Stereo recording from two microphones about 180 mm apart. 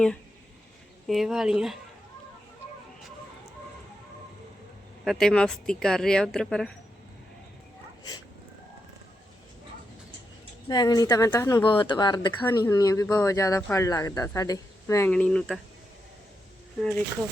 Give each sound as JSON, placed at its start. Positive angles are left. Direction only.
{"t": 1.0, "sound": "speech", "side_deg": 0}
{"t": 5.0, "sound": "speech", "side_deg": 5}
{"t": 10.7, "sound": "speech", "side_deg": 20}
{"t": 15.1, "sound": "speech", "side_deg": 5}